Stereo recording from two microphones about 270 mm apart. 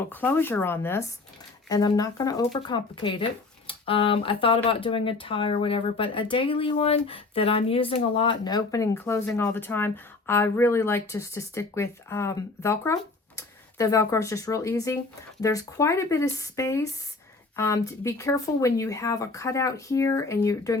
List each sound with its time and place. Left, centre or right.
0.1 s speech: centre